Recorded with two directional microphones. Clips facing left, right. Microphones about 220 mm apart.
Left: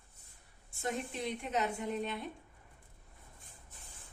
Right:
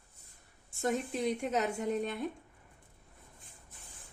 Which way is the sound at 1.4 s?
45° right (ahead or behind).